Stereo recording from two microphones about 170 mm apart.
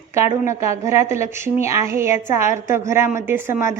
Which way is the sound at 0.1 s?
15° right (ahead or behind).